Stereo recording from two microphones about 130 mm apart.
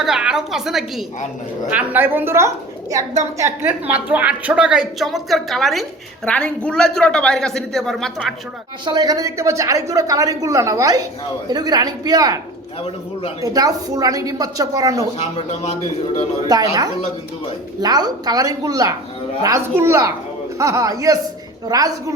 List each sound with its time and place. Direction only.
0.0 s a woman's voice: 5° right (ahead or behind)
8.8 s speech: 30° right (ahead or behind)
13.4 s speech: 30° right (ahead or behind)
15.2 s speech: 55° left (ahead or behind)
16.5 s speech: 30° right (ahead or behind)
17.7 s speech: 30° right (ahead or behind)